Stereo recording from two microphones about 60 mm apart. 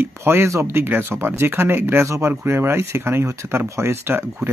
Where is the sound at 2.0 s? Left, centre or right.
Right.